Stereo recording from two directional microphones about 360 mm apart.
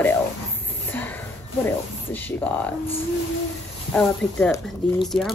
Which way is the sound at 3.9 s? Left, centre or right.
Centre.